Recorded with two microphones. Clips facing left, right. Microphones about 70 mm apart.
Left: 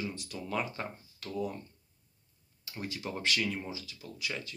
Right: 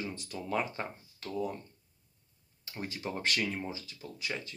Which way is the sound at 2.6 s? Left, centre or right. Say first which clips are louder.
Right 1 dB; right.